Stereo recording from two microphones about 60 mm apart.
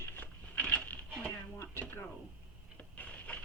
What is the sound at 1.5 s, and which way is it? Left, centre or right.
Speech, left.